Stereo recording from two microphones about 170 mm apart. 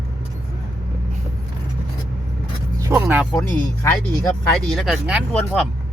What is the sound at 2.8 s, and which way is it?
Speech, 15° right (ahead or behind).